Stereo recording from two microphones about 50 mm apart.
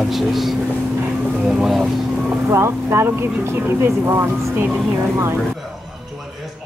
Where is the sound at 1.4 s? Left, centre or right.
Centre.